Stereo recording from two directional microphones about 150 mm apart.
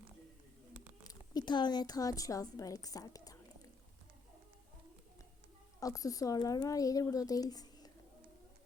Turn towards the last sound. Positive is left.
turn(degrees=25)  # may be behind; listen again after turning